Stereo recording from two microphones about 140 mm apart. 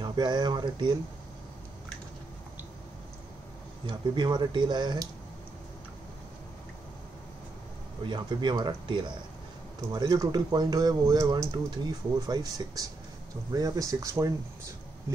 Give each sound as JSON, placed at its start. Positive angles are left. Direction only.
{"t": 0.0, "sound": "speech", "side_deg": -30}
{"t": 3.8, "sound": "speech", "side_deg": -35}
{"t": 8.0, "sound": "speech", "side_deg": -35}